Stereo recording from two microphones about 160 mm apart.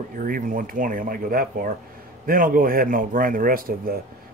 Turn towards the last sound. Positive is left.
turn(degrees=-65)  # may be behind; listen again after turning